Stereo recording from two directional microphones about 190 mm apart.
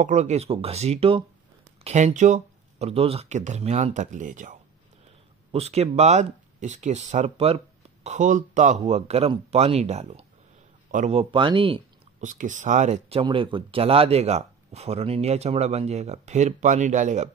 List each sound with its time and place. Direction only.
0.0 s speech: 35° right (ahead or behind)
12.2 s speech: 40° right (ahead or behind)
13.2 s speech: 25° right (ahead or behind)